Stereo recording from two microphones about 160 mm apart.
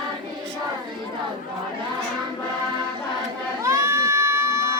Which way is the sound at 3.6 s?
20° right (ahead or behind).